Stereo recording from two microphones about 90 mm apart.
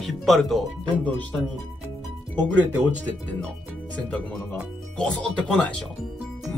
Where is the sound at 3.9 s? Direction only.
15° left (ahead or behind).